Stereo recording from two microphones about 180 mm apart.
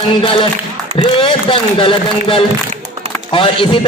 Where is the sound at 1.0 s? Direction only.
30° left (ahead or behind).